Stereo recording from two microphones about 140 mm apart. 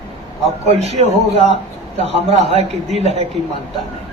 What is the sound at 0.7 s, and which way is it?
A man's voice, 50° right (ahead or behind).